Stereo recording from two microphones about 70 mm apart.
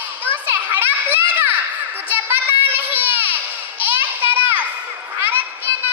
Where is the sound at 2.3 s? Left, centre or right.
Right.